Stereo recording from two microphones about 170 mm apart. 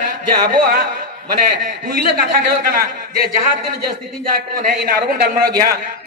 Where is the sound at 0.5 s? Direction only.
50° right (ahead or behind).